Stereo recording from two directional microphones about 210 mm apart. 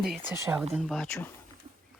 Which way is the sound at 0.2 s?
15° right (ahead or behind).